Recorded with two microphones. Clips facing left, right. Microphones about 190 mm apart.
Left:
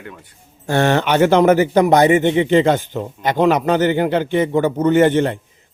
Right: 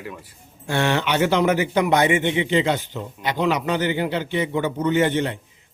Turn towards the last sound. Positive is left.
turn(degrees=50)  # may be behind; listen again after turning